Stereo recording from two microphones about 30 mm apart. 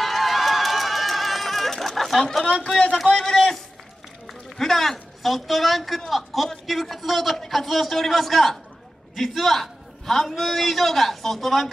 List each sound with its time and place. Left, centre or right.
0.0 s chatter: centre
3.3 s a man's voice: centre
4.6 s a man's voice: centre